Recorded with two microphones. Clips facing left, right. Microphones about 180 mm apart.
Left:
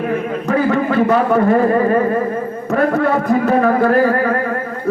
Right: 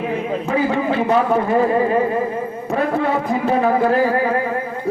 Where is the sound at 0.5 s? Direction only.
50° left (ahead or behind).